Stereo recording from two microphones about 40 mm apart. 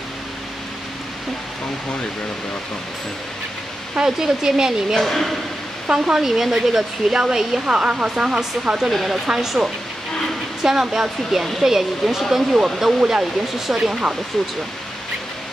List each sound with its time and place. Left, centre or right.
4.0 s speech: centre
4.9 s speech: centre
5.9 s speech: centre
8.9 s speech: centre
9.3 s speech: centre